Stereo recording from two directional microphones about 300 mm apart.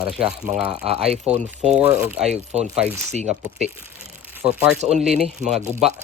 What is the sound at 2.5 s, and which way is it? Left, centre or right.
Speech, right.